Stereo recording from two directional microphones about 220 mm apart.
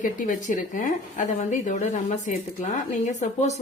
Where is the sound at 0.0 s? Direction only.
35° left (ahead or behind).